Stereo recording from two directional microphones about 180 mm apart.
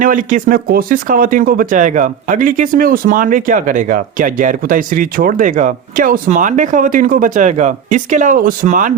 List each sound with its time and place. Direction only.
0.0 s speech: 50° right (ahead or behind)